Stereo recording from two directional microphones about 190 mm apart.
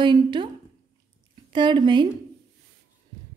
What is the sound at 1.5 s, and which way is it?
Speech, 25° right (ahead or behind).